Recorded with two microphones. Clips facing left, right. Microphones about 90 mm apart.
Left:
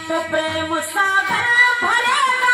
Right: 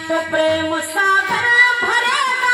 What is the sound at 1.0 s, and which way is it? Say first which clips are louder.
Music: right 4 dB; 20° right (ahead or behind).